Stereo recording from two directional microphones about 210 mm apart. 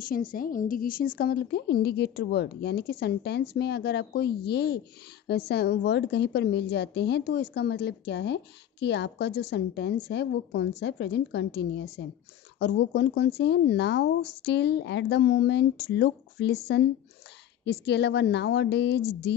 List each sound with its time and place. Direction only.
0.3 s a woman's voice: 40° left (ahead or behind)